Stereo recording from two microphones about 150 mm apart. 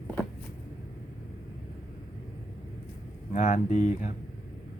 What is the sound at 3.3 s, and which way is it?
Speech, 55° left (ahead or behind).